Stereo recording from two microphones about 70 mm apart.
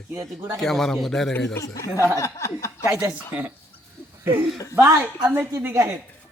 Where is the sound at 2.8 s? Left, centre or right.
Right.